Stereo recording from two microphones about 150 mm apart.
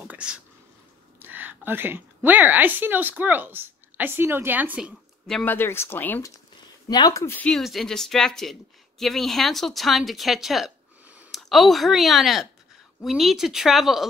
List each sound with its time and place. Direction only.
0.0 s a woman's voice: 10° right (ahead or behind)
5.2 s speech: 5° left (ahead or behind)
6.9 s speech: 25° left (ahead or behind)
7.3 s a woman's voice: 5° left (ahead or behind)